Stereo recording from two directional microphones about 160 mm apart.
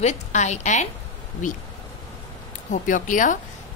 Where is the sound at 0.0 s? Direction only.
45° left (ahead or behind).